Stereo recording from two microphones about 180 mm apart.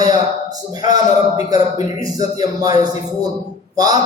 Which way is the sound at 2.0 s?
20° right (ahead or behind).